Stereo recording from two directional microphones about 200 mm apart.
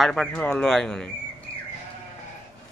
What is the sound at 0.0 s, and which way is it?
A man's voice, 5° left (ahead or behind).